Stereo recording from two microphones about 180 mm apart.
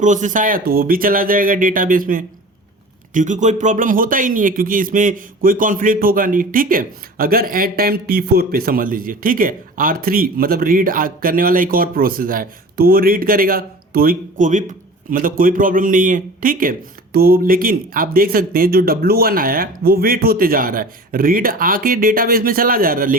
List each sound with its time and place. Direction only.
0.0 s a man's voice: 45° right (ahead or behind)